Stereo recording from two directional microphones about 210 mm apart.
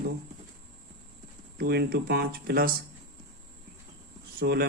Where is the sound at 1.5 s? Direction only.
50° right (ahead or behind).